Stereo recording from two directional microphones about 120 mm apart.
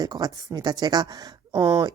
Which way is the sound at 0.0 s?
35° right (ahead or behind).